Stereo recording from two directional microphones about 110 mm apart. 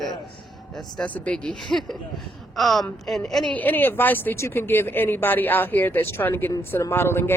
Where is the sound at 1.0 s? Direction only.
15° left (ahead or behind).